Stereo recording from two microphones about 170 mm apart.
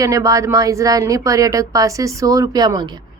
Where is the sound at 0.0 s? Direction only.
20° right (ahead or behind).